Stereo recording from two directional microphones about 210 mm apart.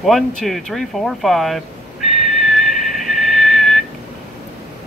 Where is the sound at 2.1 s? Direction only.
Centre (ahead or behind).